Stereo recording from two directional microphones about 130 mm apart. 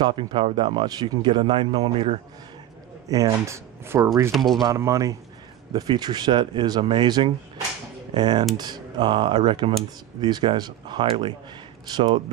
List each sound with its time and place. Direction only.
0.0 s speech: 35° right (ahead or behind)
3.1 s speech: 25° right (ahead or behind)
4.3 s speech: centre (ahead or behind)
4.6 s speech: 25° right (ahead or behind)